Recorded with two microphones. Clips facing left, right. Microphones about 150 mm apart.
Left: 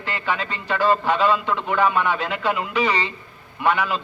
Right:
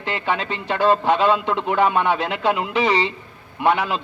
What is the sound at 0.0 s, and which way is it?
A man's voice, 25° right (ahead or behind).